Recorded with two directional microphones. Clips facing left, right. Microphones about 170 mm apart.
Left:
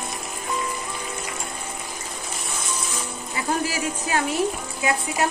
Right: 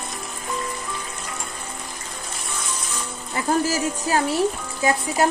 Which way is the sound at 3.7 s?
35° right (ahead or behind).